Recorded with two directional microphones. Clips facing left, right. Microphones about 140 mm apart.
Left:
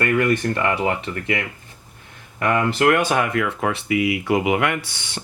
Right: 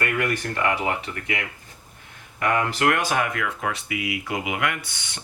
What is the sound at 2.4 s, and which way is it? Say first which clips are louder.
Speech: left 4 dB; 25° left (ahead or behind).